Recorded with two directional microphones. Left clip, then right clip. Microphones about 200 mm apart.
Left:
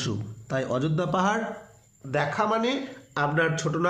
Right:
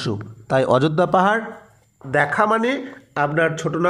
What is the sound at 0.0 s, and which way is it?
A man's voice, 40° right (ahead or behind).